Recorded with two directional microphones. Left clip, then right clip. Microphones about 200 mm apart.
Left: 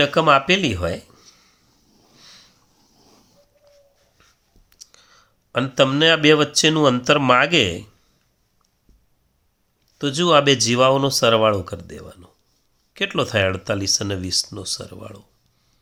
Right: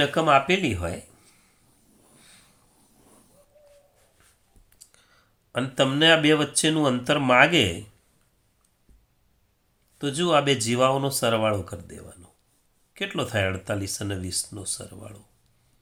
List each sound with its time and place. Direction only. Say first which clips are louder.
0.0 s speech: left 4 dB; 35° left (ahead or behind)
2.1 s a sound: left 8 dB; 40° left (ahead or behind)
4.7 s speech: left 9 dB; 30° left (ahead or behind)
10.0 s speech: left 6 dB; 40° left (ahead or behind)